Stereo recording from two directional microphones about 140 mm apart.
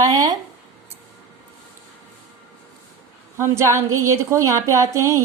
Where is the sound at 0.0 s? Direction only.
25° right (ahead or behind).